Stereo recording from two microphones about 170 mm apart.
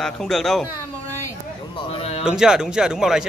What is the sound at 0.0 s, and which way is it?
Speech, centre (ahead or behind).